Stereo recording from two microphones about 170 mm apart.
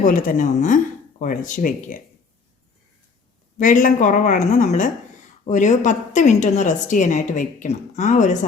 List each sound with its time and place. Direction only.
0.0 s a woman's voice: 50° left (ahead or behind)
3.6 s a woman's voice: 50° left (ahead or behind)